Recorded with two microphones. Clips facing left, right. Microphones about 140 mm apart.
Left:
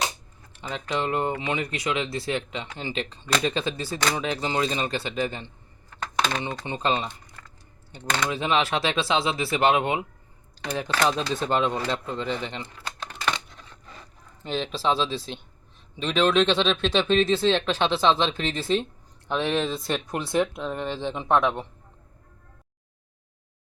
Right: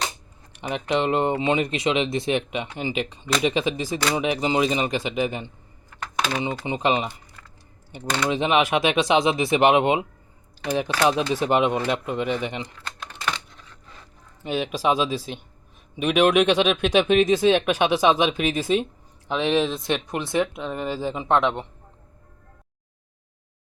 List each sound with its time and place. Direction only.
0.5 s speech: 20° right (ahead or behind)
5.9 s typing: 5° right (ahead or behind)
8.3 s speech: 20° right (ahead or behind)
14.4 s speech: 10° right (ahead or behind)